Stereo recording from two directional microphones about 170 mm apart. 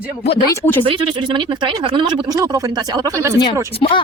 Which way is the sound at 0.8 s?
30° right (ahead or behind).